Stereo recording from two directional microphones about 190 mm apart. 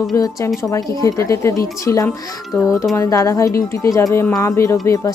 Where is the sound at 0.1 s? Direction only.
20° left (ahead or behind).